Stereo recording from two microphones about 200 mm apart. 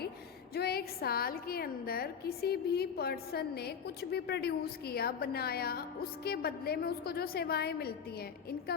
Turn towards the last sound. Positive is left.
turn(degrees=55)  # may be behind; listen again after turning